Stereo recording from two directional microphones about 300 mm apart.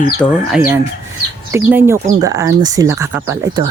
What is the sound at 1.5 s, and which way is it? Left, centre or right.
Speech, centre.